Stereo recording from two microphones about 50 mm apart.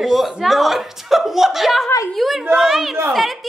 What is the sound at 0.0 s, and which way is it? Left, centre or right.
A man's voice, centre.